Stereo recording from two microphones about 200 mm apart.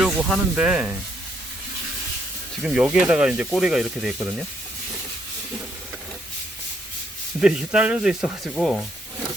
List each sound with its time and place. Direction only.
0.0 s speech: 5° right (ahead or behind)
2.6 s speech: 5° right (ahead or behind)
7.3 s speech: 5° right (ahead or behind)